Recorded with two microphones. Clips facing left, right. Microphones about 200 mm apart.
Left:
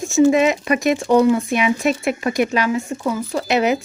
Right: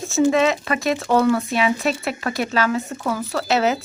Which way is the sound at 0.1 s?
15° left (ahead or behind).